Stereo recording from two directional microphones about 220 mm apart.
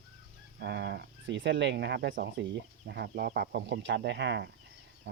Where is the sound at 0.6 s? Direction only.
50° right (ahead or behind).